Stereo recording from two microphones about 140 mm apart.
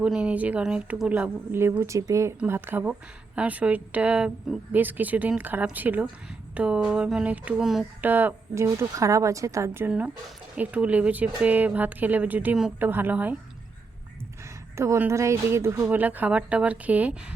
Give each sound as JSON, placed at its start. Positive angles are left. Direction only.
{"t": 0.0, "sound": "speech", "side_deg": -5}
{"t": 8.0, "sound": "speech", "side_deg": -15}
{"t": 10.5, "sound": "speech", "side_deg": -10}
{"t": 14.8, "sound": "speech", "side_deg": -15}